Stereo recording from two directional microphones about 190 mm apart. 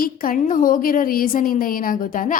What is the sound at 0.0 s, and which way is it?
A woman's voice, 50° left (ahead or behind).